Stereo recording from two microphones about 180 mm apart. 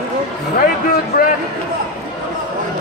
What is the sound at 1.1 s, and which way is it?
Speech, 55° left (ahead or behind).